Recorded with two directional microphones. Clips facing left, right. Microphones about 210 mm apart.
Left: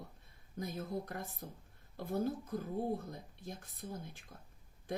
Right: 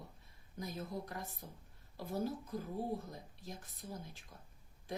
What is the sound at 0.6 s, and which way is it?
Speech, 55° left (ahead or behind).